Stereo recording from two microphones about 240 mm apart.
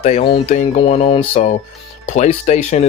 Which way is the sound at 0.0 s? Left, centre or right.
Left.